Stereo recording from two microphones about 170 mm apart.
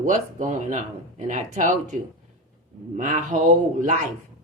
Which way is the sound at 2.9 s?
50° right (ahead or behind).